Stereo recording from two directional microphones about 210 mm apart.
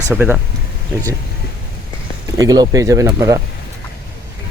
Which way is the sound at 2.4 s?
15° right (ahead or behind).